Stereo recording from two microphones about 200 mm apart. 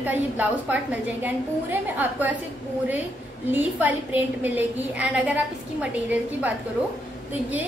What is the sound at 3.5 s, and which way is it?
A woman's voice, 10° right (ahead or behind).